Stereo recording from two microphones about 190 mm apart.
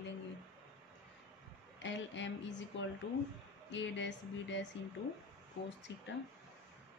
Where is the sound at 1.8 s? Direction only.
70° left (ahead or behind).